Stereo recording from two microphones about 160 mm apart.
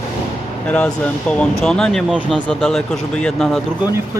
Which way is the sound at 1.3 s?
5° left (ahead or behind).